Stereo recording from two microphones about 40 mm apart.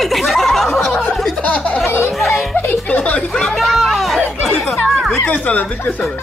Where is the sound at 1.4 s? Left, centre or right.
Left.